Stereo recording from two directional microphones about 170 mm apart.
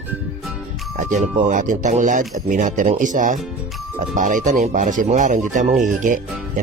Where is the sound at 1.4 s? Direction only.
50° right (ahead or behind).